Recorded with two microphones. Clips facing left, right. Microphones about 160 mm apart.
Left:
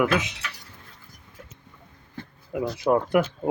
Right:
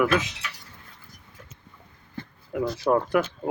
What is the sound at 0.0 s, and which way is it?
Speech, 20° left (ahead or behind).